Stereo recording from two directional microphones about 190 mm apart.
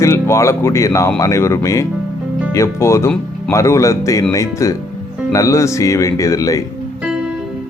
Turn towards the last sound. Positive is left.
turn(degrees=15)  # may be behind; listen again after turning